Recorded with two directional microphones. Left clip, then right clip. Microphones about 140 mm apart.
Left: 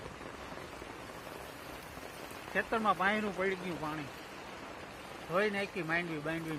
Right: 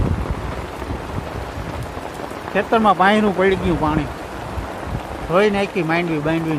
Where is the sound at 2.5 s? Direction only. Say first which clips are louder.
Right 16 dB; centre (ahead or behind).